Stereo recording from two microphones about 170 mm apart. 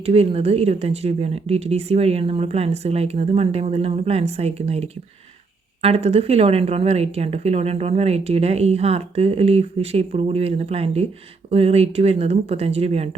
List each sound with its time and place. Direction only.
0.0 s a woman's voice: 35° right (ahead or behind)